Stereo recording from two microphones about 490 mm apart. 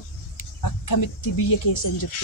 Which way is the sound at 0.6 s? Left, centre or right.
Left.